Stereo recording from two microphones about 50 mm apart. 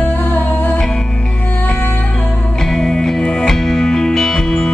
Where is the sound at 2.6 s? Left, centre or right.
Centre.